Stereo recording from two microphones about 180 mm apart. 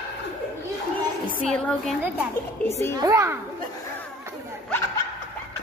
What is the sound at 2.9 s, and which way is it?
Speech, 20° right (ahead or behind).